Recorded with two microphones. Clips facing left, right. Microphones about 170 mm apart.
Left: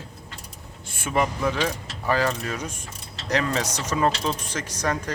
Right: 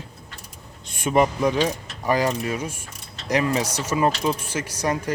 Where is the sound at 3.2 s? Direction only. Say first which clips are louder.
Right 3 dB; 10° right (ahead or behind).